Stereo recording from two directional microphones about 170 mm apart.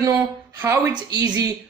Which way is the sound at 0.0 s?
20° right (ahead or behind).